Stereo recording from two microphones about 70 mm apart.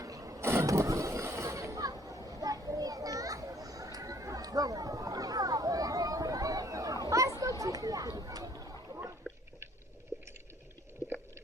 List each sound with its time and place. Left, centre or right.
0.0 s vehicle: right
7.6 s chatter: right
9.2 s a sound: centre